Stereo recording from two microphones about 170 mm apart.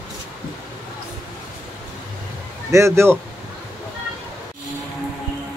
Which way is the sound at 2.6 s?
15° right (ahead or behind).